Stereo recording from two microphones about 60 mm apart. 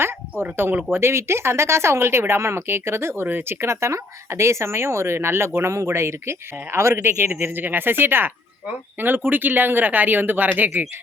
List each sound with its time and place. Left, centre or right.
0.0 s speech: right
5.7 s speech: right